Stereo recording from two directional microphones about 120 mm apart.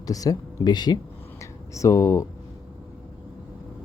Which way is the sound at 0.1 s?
30° left (ahead or behind).